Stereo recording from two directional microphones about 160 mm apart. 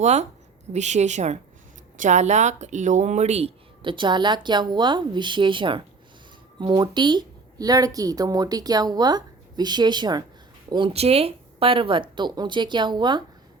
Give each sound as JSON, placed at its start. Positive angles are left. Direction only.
{"t": 0.0, "sound": "a woman's voice", "side_deg": -45}